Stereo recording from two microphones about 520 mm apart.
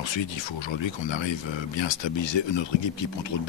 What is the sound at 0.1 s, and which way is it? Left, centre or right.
Speech, left.